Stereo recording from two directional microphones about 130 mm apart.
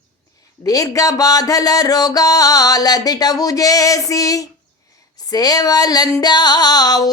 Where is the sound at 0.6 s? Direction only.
25° left (ahead or behind).